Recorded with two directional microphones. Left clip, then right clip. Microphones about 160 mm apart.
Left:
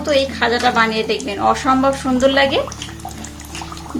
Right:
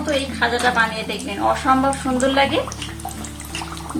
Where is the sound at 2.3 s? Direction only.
60° left (ahead or behind).